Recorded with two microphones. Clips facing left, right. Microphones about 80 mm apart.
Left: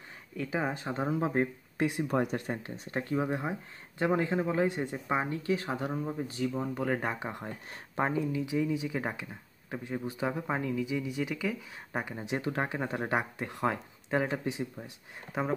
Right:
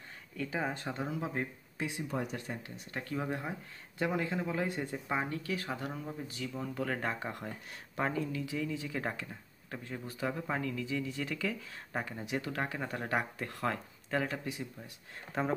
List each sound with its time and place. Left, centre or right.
0.4 s speech: centre
0.9 s speech: left
15.4 s speech: centre